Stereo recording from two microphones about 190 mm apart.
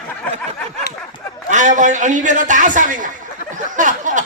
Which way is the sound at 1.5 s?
40° right (ahead or behind).